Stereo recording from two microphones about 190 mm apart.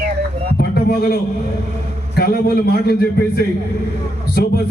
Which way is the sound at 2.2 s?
55° left (ahead or behind).